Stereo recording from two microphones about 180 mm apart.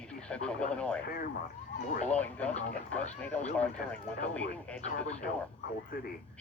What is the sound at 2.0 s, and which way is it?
Speech, 5° left (ahead or behind).